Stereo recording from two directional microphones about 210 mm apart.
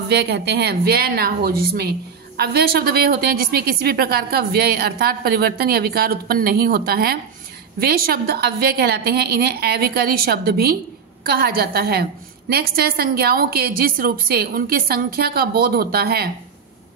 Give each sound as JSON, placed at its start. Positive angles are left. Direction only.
{"t": 0.1, "sound": "a woman's voice", "side_deg": -50}